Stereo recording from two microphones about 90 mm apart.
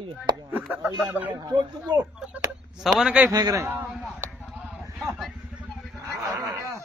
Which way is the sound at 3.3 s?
45° right (ahead or behind).